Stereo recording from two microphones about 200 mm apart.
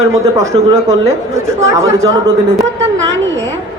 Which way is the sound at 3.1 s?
70° right (ahead or behind).